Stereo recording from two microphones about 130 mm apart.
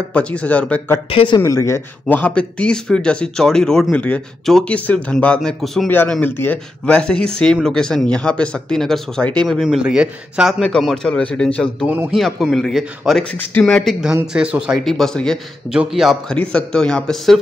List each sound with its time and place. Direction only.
0.1 s speech: 10° left (ahead or behind)
1.1 s speech: 40° left (ahead or behind)
1.4 s speech: 20° left (ahead or behind); by 5.9 s 5° left (ahead or behind)
6.2 s speech: 15° left (ahead or behind); by 10.5 s 5° right (ahead or behind)
10.6 s speech: 5° left (ahead or behind)
13.4 s speech: 10° left (ahead or behind)
14.2 s speech: 5° right (ahead or behind)